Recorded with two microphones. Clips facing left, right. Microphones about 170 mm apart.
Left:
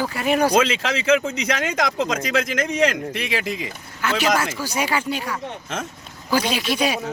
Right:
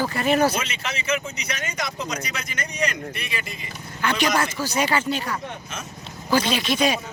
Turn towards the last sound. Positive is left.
turn(degrees=10)  # may be behind; listen again after turning